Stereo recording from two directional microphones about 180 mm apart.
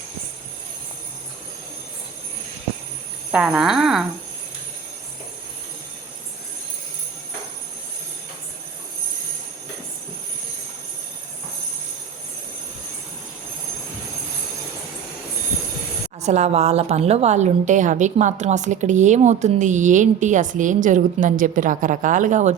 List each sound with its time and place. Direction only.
3.3 s speech: 5° right (ahead or behind)
16.2 s a woman's voice: 40° right (ahead or behind)